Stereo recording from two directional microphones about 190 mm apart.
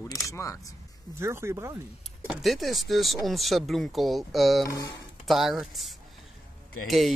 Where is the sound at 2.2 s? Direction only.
Centre (ahead or behind).